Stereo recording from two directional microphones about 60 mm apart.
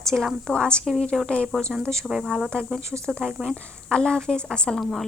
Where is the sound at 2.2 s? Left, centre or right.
Centre.